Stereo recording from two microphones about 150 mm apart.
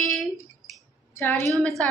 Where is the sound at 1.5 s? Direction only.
Centre (ahead or behind).